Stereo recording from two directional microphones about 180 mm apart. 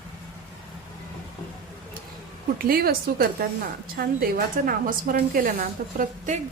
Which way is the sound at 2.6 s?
55° right (ahead or behind).